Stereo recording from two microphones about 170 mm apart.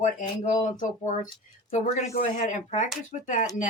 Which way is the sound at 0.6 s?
50° left (ahead or behind).